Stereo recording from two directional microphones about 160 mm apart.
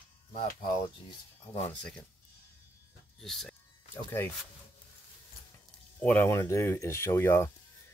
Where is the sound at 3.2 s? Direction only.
5° left (ahead or behind).